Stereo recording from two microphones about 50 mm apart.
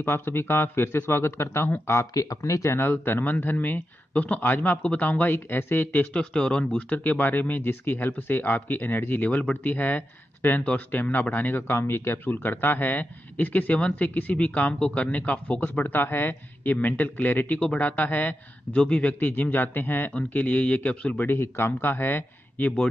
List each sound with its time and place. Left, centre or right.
0.0 s speech: left
2.8 s speech: left
6.1 s a man's voice: centre
6.9 s speech: left
12.3 s speech: left
18.8 s a man's voice: left
19.1 s speech: left
20.3 s a man's voice: left
21.2 s speech: left